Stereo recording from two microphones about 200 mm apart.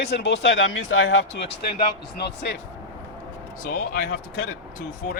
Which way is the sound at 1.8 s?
55° left (ahead or behind).